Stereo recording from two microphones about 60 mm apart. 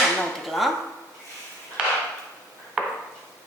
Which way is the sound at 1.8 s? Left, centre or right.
Centre.